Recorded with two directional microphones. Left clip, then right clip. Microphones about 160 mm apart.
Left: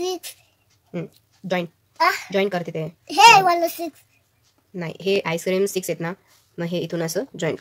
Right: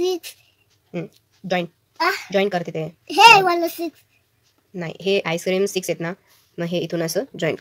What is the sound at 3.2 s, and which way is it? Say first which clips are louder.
Speech: right 1 dB; 65° left (ahead or behind).